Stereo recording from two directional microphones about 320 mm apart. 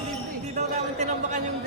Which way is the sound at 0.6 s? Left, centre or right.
Right.